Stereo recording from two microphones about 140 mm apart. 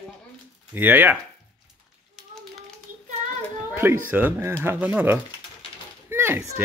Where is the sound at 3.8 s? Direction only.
15° right (ahead or behind).